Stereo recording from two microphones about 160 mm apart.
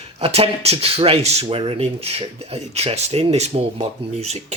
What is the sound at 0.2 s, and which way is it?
Speech, 40° right (ahead or behind).